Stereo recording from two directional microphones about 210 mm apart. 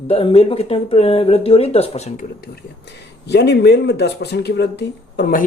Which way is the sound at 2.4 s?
55° left (ahead or behind).